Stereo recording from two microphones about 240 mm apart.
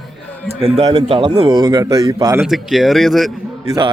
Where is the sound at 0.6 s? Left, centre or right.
Right.